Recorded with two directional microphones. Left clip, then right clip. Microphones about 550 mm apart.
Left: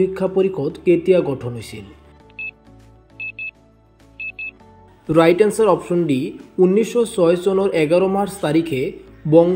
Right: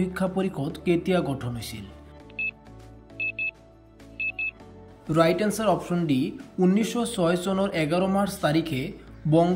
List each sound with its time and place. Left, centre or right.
0.0 s a man's voice: centre
2.4 s music: centre
5.1 s a man's voice: centre
6.0 s speech: right
6.6 s a man's voice: centre